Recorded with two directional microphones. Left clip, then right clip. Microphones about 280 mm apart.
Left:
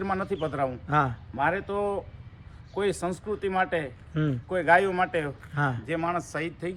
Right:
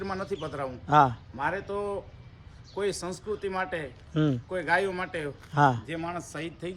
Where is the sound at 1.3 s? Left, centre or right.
Centre.